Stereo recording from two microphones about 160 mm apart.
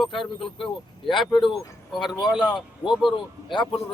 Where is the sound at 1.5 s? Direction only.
Centre (ahead or behind).